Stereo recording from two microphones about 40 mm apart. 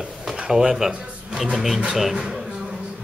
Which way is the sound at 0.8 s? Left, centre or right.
Centre.